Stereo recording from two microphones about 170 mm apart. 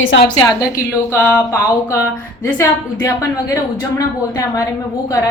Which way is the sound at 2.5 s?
20° left (ahead or behind).